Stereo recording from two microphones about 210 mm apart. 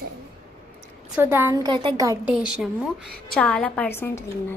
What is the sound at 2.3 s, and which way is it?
A woman's voice, 5° right (ahead or behind).